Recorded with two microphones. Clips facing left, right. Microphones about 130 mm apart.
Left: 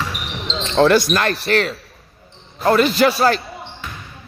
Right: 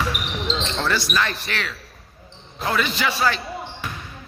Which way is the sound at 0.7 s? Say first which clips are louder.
Left 14 dB; 60° left (ahead or behind).